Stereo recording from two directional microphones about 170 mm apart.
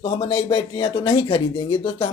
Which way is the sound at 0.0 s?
30° left (ahead or behind).